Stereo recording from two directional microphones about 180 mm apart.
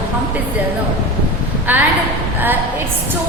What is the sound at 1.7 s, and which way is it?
Speech, 10° right (ahead or behind).